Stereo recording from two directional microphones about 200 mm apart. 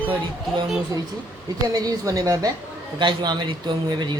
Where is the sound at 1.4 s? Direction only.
20° right (ahead or behind).